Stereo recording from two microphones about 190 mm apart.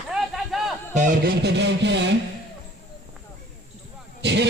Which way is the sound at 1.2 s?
60° right (ahead or behind).